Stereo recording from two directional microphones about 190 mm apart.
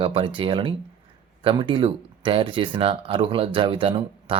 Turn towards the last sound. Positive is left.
turn(degrees=-25)  # may be behind; listen again after turning